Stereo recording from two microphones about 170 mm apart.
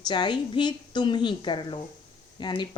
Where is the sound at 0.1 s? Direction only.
25° left (ahead or behind).